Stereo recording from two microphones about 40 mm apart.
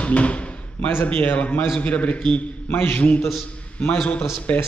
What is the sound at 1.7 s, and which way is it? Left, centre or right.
A man's voice, left.